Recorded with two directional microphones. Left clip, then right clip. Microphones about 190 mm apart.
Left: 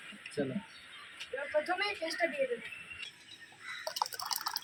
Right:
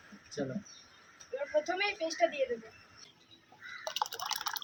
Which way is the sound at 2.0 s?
35° right (ahead or behind).